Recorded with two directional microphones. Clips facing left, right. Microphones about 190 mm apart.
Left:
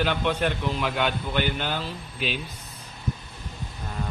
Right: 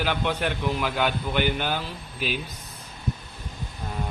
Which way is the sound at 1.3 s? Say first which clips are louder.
Right 3 dB; 10° right (ahead or behind).